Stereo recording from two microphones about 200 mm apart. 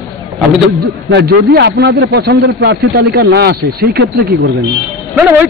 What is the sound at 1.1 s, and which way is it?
Speech, 55° right (ahead or behind).